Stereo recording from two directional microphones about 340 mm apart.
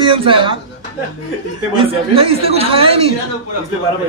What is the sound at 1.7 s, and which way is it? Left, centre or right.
Speech, centre.